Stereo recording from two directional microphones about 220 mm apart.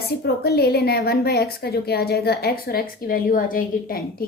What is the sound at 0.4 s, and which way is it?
A woman's voice, 45° left (ahead or behind).